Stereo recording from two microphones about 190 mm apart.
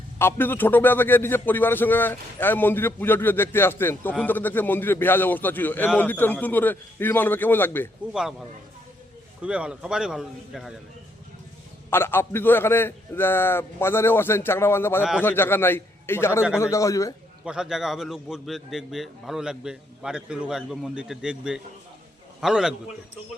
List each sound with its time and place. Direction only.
0.2 s a man's voice: 10° left (ahead or behind)
8.1 s a man's voice: 5° right (ahead or behind)
11.9 s a man's voice: 10° left (ahead or behind)
17.4 s a man's voice: 5° right (ahead or behind)